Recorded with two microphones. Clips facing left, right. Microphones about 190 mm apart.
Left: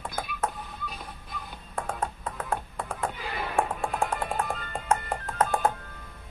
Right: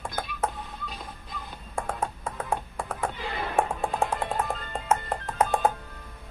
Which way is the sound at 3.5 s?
20° right (ahead or behind).